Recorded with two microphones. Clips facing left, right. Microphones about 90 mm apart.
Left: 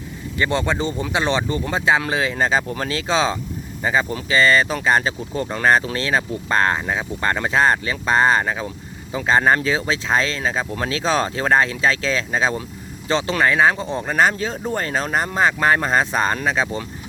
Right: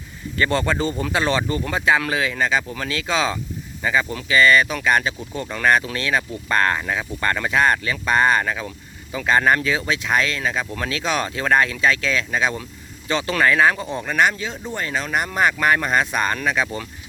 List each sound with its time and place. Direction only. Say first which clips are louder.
0.3 s speech: even; 20° left (ahead or behind); by 15.3 s 35° left (ahead or behind)
15.3 s speech: left 1 dB; 25° left (ahead or behind)